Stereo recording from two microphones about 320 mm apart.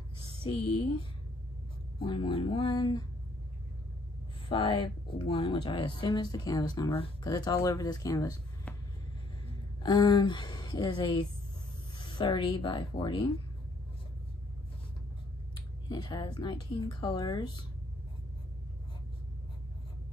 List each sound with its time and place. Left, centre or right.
0.4 s speech: centre
2.0 s speech: centre
4.5 s speech: centre
9.8 s speech: centre
15.9 s speech: centre